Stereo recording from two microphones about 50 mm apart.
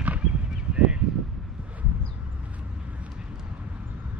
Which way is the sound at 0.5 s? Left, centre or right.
Centre.